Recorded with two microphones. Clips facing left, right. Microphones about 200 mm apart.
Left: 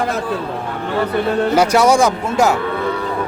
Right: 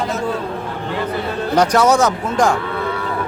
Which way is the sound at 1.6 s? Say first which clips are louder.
Right 1 dB; 10° left (ahead or behind).